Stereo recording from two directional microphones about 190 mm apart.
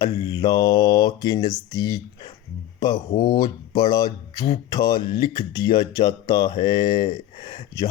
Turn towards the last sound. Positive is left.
turn(degrees=25)  # may be behind; listen again after turning